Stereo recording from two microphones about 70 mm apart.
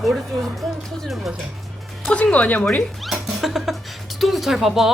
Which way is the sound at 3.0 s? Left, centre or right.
Centre.